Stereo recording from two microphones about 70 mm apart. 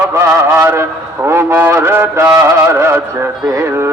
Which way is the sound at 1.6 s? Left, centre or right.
Right.